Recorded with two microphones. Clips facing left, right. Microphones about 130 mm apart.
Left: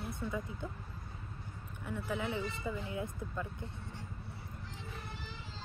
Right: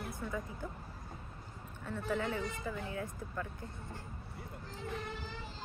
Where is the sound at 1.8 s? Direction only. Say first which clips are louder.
Right 1 dB; 15° left (ahead or behind).